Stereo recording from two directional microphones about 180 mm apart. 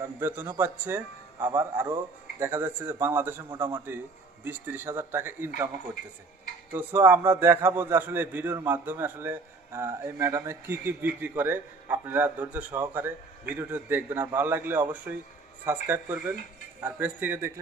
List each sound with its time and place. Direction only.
0.0 s a man's voice: 15° right (ahead or behind)
6.7 s a man's voice: 10° right (ahead or behind)